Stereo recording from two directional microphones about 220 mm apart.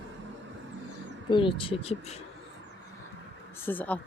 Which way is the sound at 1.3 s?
20° left (ahead or behind).